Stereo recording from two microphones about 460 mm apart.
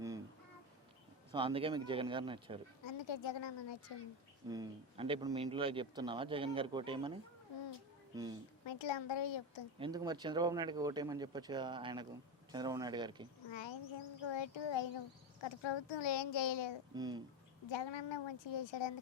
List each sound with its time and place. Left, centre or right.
1.3 s speech: centre
2.8 s speech: left
4.4 s speech: centre
8.1 s speech: centre
8.6 s speech: left
9.7 s speech: centre
13.5 s a child's voice: left
16.9 s speech: centre
17.7 s speech: left